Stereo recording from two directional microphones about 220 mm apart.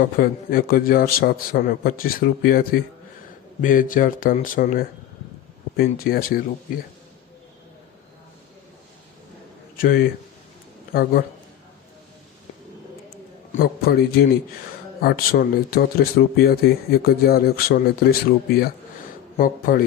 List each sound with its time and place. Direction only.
0.0 s a man's voice: 40° left (ahead or behind)
9.7 s a man's voice: 40° left (ahead or behind)
13.5 s a man's voice: 45° left (ahead or behind)